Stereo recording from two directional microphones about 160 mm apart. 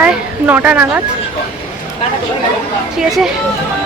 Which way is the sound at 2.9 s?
5° right (ahead or behind).